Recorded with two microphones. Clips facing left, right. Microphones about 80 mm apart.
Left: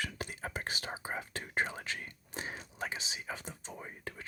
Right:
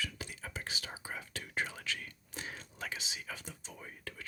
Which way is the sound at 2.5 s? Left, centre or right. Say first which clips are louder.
Left 3 dB; left.